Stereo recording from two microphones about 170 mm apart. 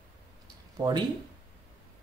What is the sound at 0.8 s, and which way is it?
Speech, 25° right (ahead or behind).